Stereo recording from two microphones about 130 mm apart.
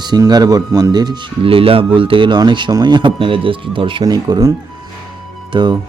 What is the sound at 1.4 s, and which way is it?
Speech, 45° right (ahead or behind).